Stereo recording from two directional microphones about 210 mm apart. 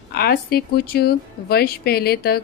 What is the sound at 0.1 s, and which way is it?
A woman's voice, 45° left (ahead or behind).